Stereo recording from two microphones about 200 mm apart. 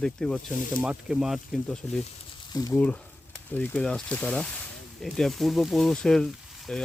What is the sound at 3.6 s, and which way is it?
Speech, 5° left (ahead or behind).